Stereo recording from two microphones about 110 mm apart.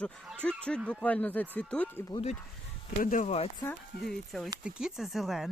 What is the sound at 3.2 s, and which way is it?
Speech, 70° left (ahead or behind).